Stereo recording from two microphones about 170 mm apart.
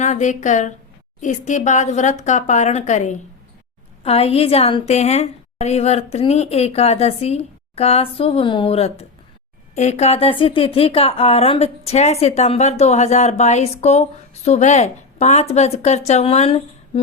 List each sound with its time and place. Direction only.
0.0 s speech: 45° left (ahead or behind)